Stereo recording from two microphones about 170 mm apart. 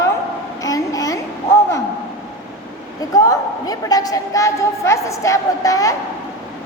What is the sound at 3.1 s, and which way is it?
A woman's voice, 20° left (ahead or behind).